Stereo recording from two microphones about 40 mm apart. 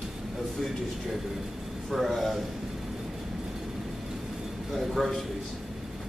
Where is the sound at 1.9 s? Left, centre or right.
Centre.